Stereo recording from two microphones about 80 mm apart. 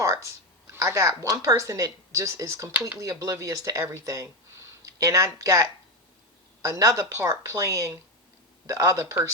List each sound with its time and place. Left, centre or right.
0.0 s a woman's voice: right